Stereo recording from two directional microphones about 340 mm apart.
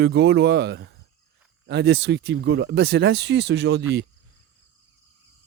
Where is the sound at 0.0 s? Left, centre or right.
Right.